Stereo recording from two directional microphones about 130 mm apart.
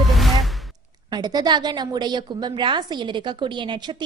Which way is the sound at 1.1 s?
30° right (ahead or behind).